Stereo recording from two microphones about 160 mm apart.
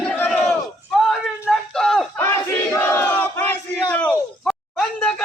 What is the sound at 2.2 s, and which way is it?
Battle cry, 15° left (ahead or behind).